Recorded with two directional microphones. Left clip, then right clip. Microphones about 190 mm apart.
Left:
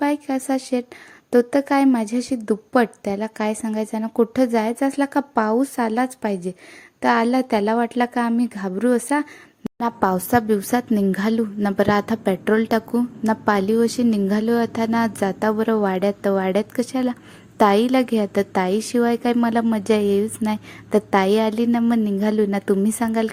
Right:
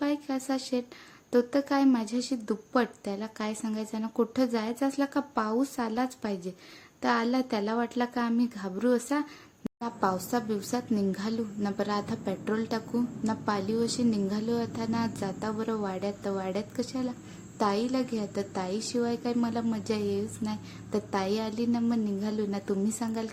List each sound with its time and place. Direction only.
0.0 s a woman's voice: 30° left (ahead or behind)